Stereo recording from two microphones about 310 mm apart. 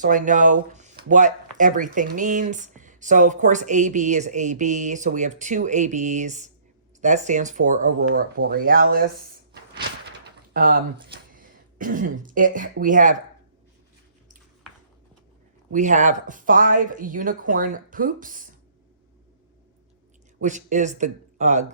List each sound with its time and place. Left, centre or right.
0.0 s speech: right
15.7 s speech: right
20.4 s speech: right